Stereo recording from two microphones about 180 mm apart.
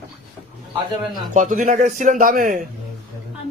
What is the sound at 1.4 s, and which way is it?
A man's voice, 45° right (ahead or behind).